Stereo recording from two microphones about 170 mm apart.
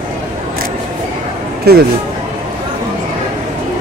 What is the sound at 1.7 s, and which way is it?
Speech, 70° right (ahead or behind).